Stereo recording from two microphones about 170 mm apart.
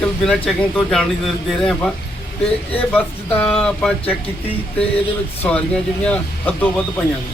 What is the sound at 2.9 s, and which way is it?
Speech, 10° left (ahead or behind).